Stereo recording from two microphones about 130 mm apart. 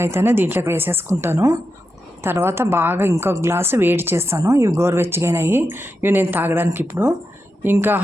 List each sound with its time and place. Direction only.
0.0 s a woman's voice: 20° right (ahead or behind)